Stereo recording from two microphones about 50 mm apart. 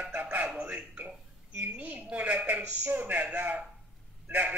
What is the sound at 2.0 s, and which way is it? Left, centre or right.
A man's voice, right.